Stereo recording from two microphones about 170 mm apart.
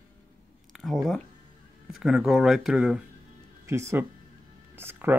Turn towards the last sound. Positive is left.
turn(degrees=-10)  # may be behind; listen again after turning